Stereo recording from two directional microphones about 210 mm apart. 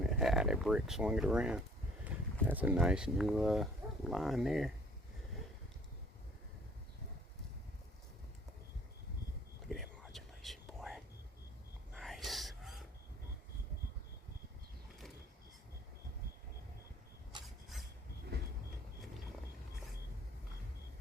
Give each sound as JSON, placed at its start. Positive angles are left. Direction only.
{"t": 0.1, "sound": "speech", "side_deg": 0}
{"t": 9.6, "sound": "whispering", "side_deg": 0}
{"t": 18.3, "sound": "vehicle", "side_deg": -50}